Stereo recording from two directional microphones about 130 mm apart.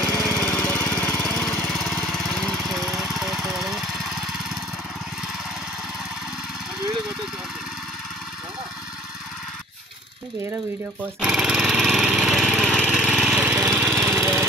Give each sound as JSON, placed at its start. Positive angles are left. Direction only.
{"t": 0.2, "sound": "lawn mower", "side_deg": 10}
{"t": 2.0, "sound": "lawn mower", "side_deg": 5}
{"t": 11.1, "sound": "lawn mower", "side_deg": -5}